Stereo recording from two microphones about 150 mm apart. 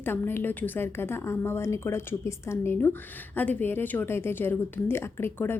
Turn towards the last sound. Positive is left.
turn(degrees=15)  # may be behind; listen again after turning